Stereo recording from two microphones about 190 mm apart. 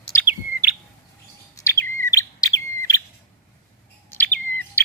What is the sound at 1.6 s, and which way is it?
Bird, 15° left (ahead or behind).